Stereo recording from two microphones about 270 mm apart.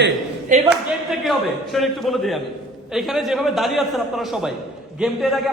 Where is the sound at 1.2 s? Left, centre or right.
Centre.